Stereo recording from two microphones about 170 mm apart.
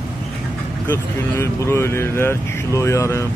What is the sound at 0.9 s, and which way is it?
Speech, 15° left (ahead or behind).